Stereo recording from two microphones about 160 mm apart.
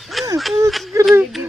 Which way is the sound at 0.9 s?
20° right (ahead or behind).